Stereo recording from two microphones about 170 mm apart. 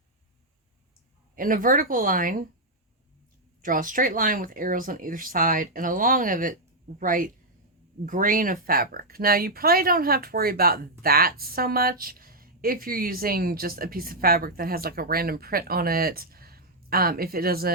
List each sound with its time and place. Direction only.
1.4 s speech: 55° right (ahead or behind)
3.6 s speech: 55° right (ahead or behind)